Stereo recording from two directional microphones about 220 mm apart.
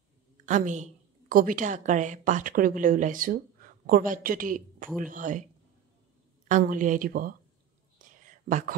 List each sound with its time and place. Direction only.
0.5 s speech: 35° right (ahead or behind)
6.5 s speech: 35° right (ahead or behind)
8.5 s speech: 35° right (ahead or behind)